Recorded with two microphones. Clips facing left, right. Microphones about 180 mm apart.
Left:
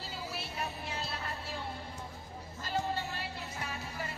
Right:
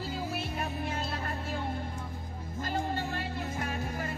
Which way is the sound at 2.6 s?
50° right (ahead or behind).